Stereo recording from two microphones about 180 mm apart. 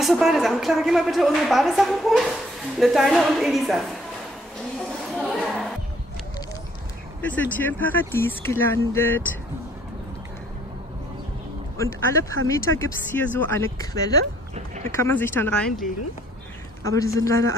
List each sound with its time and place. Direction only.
0.0 s a woman's voice: centre (ahead or behind)
5.1 s speech: centre (ahead or behind)
7.2 s speech: 10° left (ahead or behind)
11.7 s speech: 15° left (ahead or behind)
16.8 s speech: 20° left (ahead or behind)